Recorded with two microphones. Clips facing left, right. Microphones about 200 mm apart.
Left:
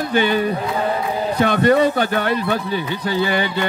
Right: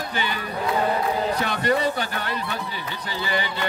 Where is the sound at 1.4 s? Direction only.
55° left (ahead or behind).